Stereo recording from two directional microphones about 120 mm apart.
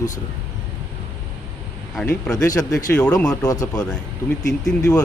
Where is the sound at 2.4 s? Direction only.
30° left (ahead or behind).